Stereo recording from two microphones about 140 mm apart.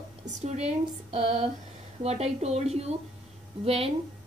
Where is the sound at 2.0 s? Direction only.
50° right (ahead or behind).